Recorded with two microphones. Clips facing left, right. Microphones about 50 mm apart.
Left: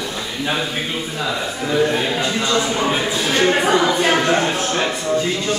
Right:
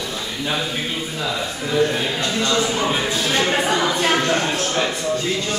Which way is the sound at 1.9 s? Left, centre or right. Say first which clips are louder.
Left 2 dB; centre.